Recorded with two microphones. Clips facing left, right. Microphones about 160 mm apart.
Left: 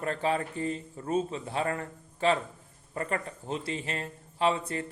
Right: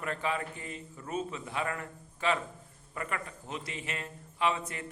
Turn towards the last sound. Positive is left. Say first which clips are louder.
# left 4 dB
turn(degrees=30)  # may be behind; listen again after turning